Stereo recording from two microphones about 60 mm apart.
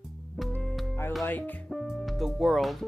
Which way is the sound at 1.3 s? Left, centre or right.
Left.